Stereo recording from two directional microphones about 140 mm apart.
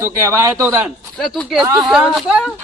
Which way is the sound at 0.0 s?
20° right (ahead or behind).